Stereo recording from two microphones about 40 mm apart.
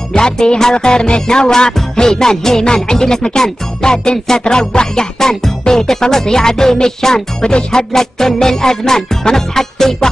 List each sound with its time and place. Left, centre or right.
0.1 s music: left